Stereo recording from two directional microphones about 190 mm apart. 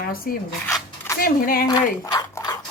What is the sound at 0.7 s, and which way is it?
Zipper, 15° left (ahead or behind).